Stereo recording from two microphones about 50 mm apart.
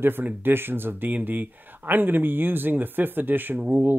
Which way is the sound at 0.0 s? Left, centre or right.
Right.